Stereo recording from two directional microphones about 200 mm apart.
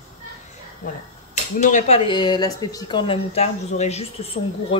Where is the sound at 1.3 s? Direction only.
35° left (ahead or behind).